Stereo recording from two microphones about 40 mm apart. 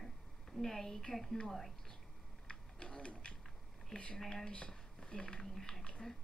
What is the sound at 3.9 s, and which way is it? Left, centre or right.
Speech, left.